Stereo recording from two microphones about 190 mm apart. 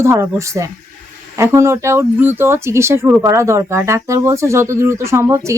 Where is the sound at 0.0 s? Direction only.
15° right (ahead or behind).